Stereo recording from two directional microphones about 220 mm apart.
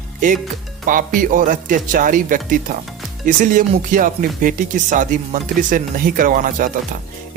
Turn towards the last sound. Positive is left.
turn(degrees=-40)  # may be behind; listen again after turning